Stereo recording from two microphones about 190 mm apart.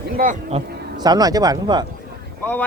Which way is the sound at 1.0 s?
20° right (ahead or behind).